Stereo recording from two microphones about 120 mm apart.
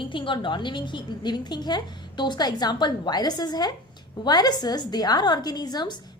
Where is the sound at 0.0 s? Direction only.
45° left (ahead or behind).